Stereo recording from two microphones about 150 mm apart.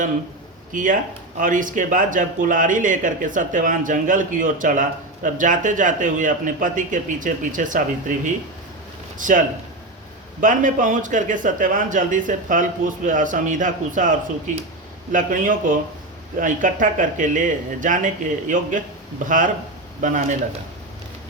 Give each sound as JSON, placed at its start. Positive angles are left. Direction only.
{"t": 0.7, "sound": "speech", "side_deg": -60}
{"t": 10.4, "sound": "speech", "side_deg": -60}